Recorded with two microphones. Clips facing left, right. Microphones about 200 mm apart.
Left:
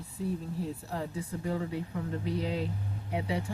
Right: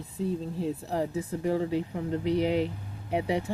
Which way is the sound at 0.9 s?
25° right (ahead or behind).